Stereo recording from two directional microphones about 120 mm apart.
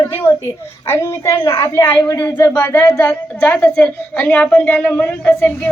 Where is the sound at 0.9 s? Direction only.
20° left (ahead or behind).